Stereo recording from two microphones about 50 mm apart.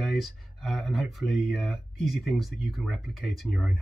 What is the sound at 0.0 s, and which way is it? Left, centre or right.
Speech, centre.